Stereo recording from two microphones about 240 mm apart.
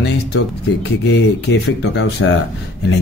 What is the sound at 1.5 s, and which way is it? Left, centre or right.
Speech, left.